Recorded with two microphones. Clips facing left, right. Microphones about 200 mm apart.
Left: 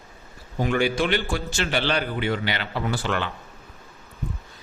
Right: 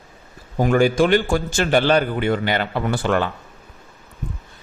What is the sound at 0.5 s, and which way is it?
A man's voice, 45° right (ahead or behind).